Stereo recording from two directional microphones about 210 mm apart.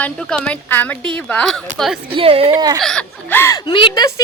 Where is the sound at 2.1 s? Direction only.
30° right (ahead or behind).